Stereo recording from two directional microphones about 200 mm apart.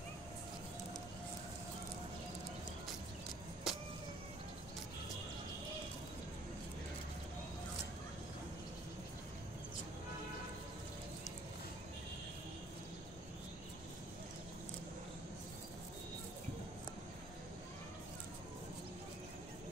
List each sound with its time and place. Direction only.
3.7 s vehicle: centre (ahead or behind)